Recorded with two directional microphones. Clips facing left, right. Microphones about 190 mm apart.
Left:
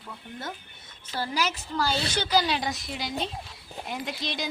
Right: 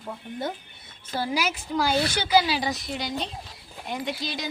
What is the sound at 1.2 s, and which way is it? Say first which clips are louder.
A woman's voice: right 2 dB; 10° right (ahead or behind).